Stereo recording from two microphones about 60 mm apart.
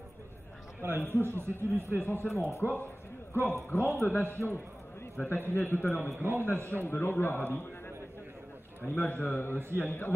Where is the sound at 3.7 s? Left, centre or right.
Left.